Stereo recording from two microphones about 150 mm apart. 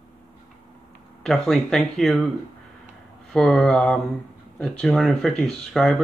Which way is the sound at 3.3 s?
5° left (ahead or behind).